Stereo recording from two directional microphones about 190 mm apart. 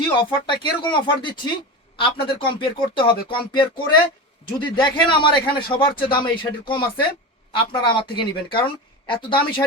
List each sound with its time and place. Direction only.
0.1 s a man's voice: 25° left (ahead or behind)